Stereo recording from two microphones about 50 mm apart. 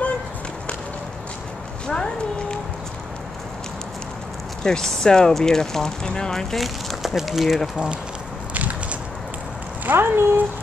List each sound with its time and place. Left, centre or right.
1.9 s speech: centre
4.6 s speech: centre
6.5 s speech: centre
8.5 s a sound: right
9.8 s speech: right